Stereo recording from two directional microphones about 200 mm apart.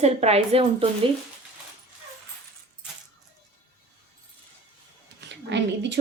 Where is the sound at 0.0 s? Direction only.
30° right (ahead or behind).